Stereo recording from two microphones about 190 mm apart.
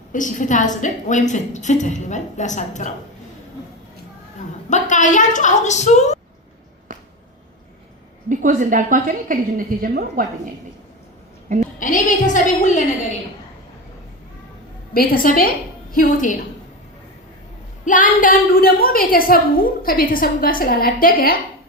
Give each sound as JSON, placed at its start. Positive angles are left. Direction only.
{"t": 0.1, "sound": "a woman's voice", "side_deg": 40}
{"t": 4.7, "sound": "a woman's voice", "side_deg": 40}
{"t": 8.3, "sound": "a woman's voice", "side_deg": -45}
{"t": 11.4, "sound": "a sound", "side_deg": -40}
{"t": 11.8, "sound": "a woman's voice", "side_deg": 40}
{"t": 14.9, "sound": "a woman's voice", "side_deg": 50}
{"t": 17.8, "sound": "a woman's voice", "side_deg": 45}